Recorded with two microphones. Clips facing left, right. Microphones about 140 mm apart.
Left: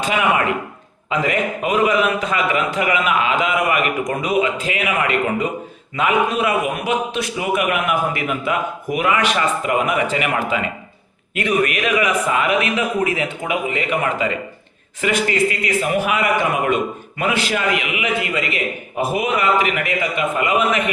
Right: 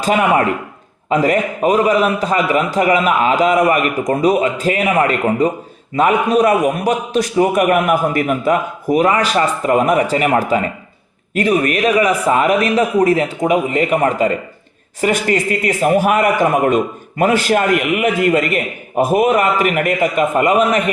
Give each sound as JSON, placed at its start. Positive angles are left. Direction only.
{"t": 0.0, "sound": "a man's voice", "side_deg": -40}